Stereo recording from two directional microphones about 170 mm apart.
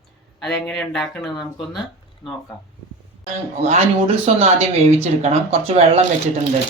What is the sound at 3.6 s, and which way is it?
Speech, 40° right (ahead or behind).